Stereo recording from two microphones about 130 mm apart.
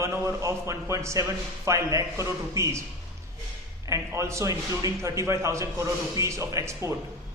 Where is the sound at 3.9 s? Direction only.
25° right (ahead or behind).